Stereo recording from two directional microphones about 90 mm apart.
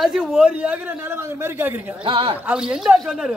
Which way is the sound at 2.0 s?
85° right.